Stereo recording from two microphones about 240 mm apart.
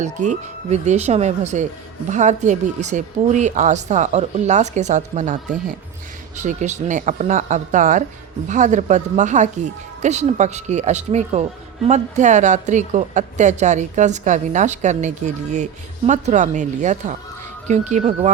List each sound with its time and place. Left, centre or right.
0.0 s speech: right